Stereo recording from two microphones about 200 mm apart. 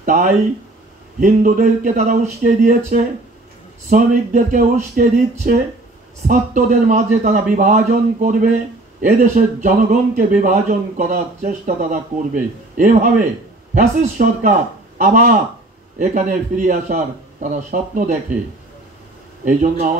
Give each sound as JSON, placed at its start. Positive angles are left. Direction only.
{"t": 0.0, "sound": "speech", "side_deg": -40}
{"t": 19.4, "sound": "speech", "side_deg": -40}